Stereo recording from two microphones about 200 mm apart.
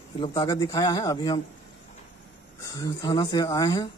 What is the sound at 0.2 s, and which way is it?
A man's voice, 25° left (ahead or behind).